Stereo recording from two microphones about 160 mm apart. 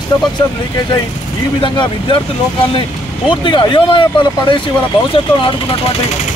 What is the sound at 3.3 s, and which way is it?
Speech, 30° left (ahead or behind).